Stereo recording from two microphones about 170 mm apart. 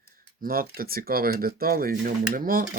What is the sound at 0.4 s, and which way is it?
Speech, 55° right (ahead or behind).